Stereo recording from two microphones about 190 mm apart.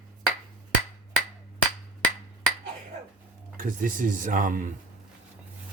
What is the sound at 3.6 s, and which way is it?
Speech, 45° right (ahead or behind).